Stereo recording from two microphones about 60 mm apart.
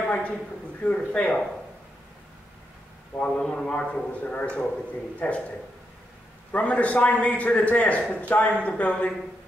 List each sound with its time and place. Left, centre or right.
0.0 s a sound: left
0.9 s a man's voice: centre
3.3 s a man's voice: centre
6.5 s a man's voice: left